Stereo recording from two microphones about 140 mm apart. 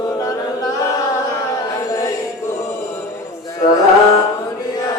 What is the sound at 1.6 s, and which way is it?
Chant, 25° left (ahead or behind).